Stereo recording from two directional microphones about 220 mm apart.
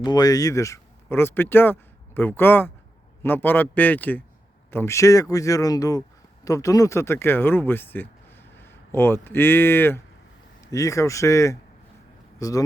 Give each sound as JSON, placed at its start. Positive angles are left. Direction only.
{"t": 0.0, "sound": "speech", "side_deg": 20}